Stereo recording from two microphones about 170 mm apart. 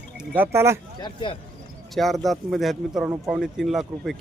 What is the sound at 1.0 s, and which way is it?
Speech, 25° left (ahead or behind).